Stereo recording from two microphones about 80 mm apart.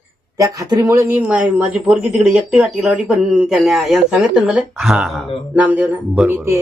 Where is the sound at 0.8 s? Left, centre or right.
Right.